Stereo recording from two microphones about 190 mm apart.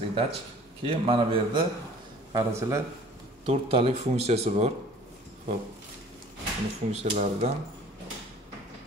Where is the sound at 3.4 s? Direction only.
30° right (ahead or behind).